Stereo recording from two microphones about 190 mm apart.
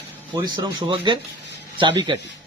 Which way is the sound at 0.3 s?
20° right (ahead or behind).